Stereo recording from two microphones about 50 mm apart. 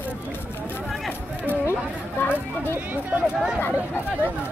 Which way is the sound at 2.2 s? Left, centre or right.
Left.